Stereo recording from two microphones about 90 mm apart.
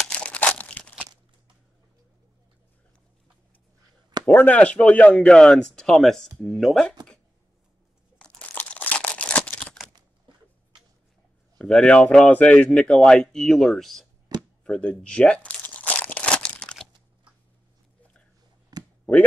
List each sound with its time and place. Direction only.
0.0 s crumpling: 10° left (ahead or behind)
4.3 s speech: 15° left (ahead or behind)
8.2 s crunch: 10° left (ahead or behind)
8.5 s crumpling: 15° left (ahead or behind)
10.3 s a sound: 65° right (ahead or behind)
11.5 s speech: 5° left (ahead or behind)
14.6 s crumpling: 10° left (ahead or behind)
18.7 s a sound: 50° right (ahead or behind)